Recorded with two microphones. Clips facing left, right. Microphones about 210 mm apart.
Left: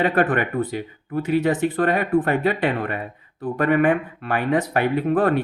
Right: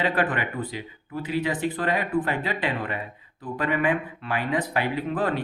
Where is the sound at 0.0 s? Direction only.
50° left (ahead or behind).